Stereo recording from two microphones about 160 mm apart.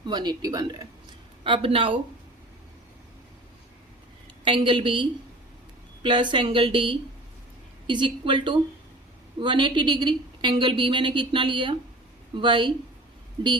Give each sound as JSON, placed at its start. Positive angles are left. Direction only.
{"t": 0.1, "sound": "a woman's voice", "side_deg": -25}
{"t": 4.4, "sound": "a woman's voice", "side_deg": -30}